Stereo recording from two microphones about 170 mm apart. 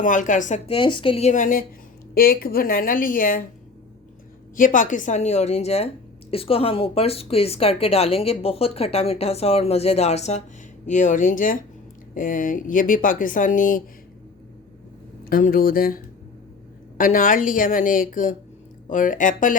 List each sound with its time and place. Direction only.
0.0 s speech: 50° left (ahead or behind)
0.7 s speech: 30° left (ahead or behind); by 1.6 s 50° left (ahead or behind)
2.1 s speech: 60° left (ahead or behind)
4.5 s speech: 50° left (ahead or behind)
15.2 s speech: 60° left (ahead or behind)
17.0 s speech: 50° left (ahead or behind)